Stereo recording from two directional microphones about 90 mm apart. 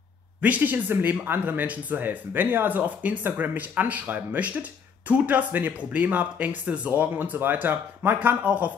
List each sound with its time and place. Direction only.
0.4 s speech: 20° right (ahead or behind)